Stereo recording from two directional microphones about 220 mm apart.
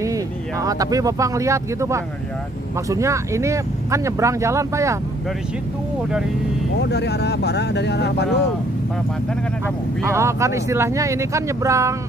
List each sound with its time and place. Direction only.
0.0 s speech: 15° right (ahead or behind)
6.8 s speech: 50° left (ahead or behind)
10.0 s speech: 10° right (ahead or behind)